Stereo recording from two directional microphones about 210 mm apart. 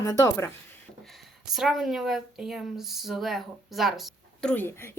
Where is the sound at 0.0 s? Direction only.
15° left (ahead or behind).